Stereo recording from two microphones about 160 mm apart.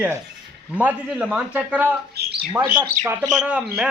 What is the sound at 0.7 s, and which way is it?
Speech, 10° right (ahead or behind).